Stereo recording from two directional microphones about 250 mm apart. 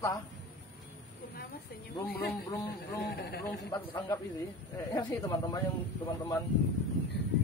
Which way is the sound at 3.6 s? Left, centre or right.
Centre.